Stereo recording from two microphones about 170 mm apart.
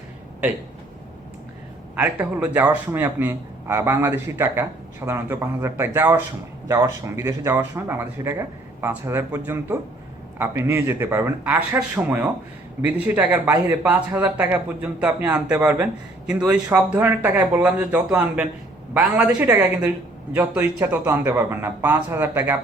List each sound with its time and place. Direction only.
2.0 s speech: 10° right (ahead or behind)